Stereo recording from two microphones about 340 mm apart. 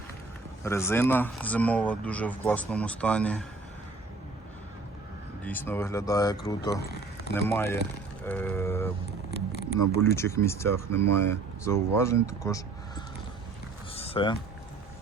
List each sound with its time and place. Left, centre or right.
0.6 s speech: centre
5.4 s speech: centre
9.3 s a sound: left
10.2 s speech: centre
10.9 s speech: right
11.2 s speech: centre
13.9 s a sound: centre